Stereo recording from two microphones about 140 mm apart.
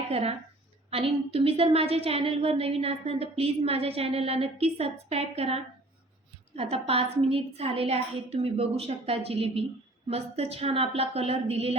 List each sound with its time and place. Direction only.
0.1 s a woman's voice: 45° right (ahead or behind)